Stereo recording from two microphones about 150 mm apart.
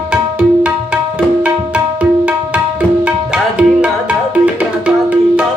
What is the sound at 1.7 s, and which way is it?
Tabla, 10° right (ahead or behind).